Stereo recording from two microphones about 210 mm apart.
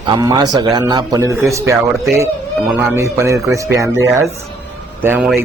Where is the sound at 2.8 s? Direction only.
15° right (ahead or behind).